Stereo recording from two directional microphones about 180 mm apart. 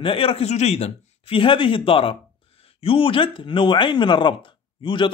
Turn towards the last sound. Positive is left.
turn(degrees=25)  # may be behind; listen again after turning